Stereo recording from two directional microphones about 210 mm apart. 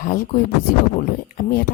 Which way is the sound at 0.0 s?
40° left (ahead or behind).